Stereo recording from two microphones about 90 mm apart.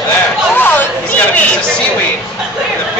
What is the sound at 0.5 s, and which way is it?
Chatter, 20° left (ahead or behind).